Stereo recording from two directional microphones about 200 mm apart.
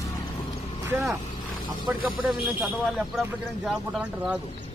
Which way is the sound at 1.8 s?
Centre (ahead or behind).